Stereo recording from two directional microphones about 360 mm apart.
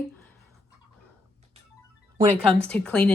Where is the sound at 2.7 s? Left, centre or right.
Centre.